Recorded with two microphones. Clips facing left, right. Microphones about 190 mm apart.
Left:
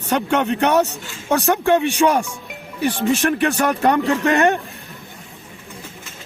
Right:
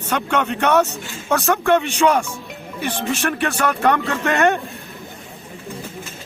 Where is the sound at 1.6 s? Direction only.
15° left (ahead or behind).